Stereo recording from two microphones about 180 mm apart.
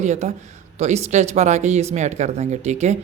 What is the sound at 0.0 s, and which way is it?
Speech, 40° right (ahead or behind).